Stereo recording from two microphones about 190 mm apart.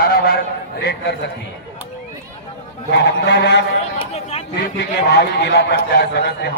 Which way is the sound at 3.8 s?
35° left (ahead or behind).